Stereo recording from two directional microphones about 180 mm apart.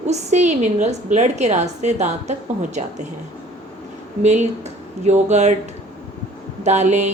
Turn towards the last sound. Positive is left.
turn(degrees=-40)  # may be behind; listen again after turning